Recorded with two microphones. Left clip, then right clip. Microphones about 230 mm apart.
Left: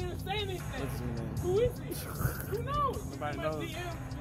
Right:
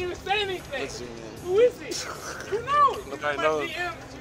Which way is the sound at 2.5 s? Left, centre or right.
Centre.